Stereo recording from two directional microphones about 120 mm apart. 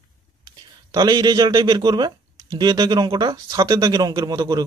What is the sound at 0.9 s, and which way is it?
Speech, 35° right (ahead or behind).